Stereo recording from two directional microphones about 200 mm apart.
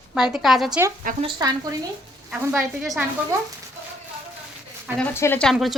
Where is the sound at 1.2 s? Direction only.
20° right (ahead or behind).